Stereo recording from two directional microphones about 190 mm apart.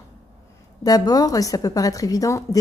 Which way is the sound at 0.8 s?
20° left (ahead or behind).